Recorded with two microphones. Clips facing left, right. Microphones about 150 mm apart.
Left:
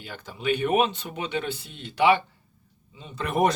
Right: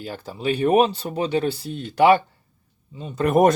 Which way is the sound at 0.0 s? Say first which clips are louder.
Right 4 dB; 35° right (ahead or behind).